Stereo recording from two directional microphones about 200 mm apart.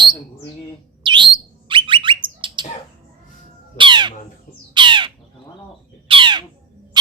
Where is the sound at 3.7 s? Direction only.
25° right (ahead or behind).